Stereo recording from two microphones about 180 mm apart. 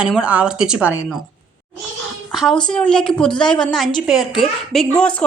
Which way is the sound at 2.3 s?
Centre (ahead or behind).